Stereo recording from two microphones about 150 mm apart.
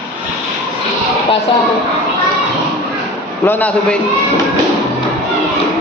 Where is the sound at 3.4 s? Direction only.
10° left (ahead or behind).